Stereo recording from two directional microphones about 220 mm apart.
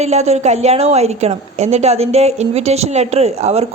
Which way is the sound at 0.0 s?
30° right (ahead or behind).